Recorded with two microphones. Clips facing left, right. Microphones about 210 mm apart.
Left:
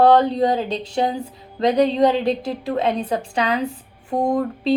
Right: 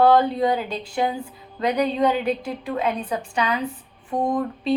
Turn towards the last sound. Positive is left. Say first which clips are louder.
# left 3 dB
turn(degrees=40)  # may be behind; listen again after turning